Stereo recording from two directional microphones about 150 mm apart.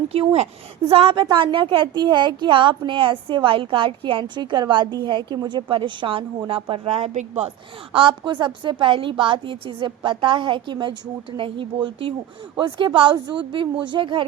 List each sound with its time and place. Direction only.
0.9 s a woman's voice: 40° right (ahead or behind)
7.9 s a woman's voice: 35° right (ahead or behind)